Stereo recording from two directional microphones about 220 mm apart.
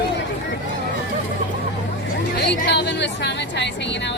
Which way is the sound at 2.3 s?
50° left (ahead or behind).